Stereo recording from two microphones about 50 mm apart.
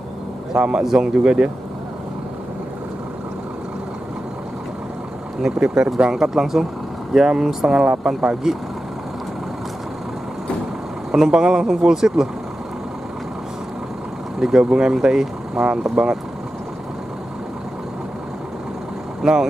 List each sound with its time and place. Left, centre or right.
0.5 s a man's voice: centre
5.4 s speech: centre
11.1 s speech: centre
14.4 s speech: centre
19.2 s speech: centre